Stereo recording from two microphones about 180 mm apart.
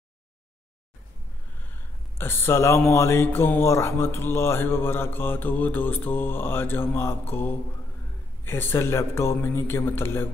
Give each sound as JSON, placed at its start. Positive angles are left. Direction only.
{"t": 2.1, "sound": "speech", "side_deg": 15}